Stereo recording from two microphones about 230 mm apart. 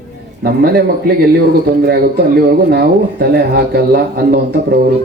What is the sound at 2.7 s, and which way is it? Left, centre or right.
A man's voice, right.